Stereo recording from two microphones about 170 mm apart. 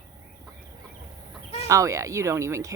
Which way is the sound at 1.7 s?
20° right (ahead or behind).